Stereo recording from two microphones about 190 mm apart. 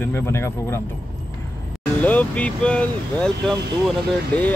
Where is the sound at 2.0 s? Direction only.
10° left (ahead or behind).